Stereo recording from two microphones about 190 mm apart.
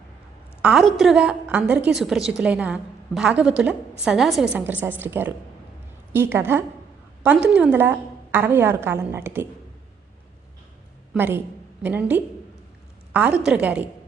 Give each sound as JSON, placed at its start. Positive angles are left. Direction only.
{"t": 0.6, "sound": "a woman's voice", "side_deg": 0}
{"t": 11.1, "sound": "a woman's voice", "side_deg": -10}